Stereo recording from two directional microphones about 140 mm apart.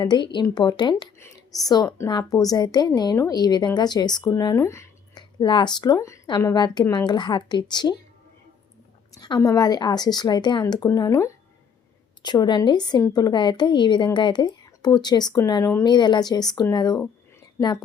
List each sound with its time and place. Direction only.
0.0 s a woman's voice: 35° left (ahead or behind)
5.4 s a woman's voice: 30° left (ahead or behind)
9.1 s a woman's voice: 30° left (ahead or behind)